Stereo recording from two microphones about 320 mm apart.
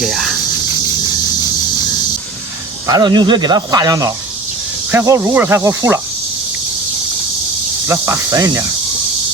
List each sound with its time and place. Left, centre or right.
0.0 s speech: centre
2.8 s speech: centre
7.9 s speech: centre